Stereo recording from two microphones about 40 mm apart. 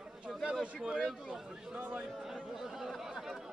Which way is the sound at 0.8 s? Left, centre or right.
Centre.